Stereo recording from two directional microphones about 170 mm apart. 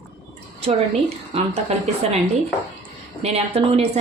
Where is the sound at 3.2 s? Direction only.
35° right (ahead or behind).